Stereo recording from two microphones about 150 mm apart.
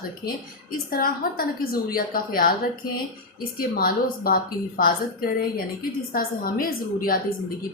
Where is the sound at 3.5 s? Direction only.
75° left (ahead or behind).